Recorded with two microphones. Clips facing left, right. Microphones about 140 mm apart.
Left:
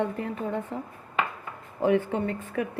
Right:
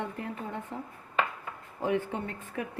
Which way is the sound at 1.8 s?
90° left.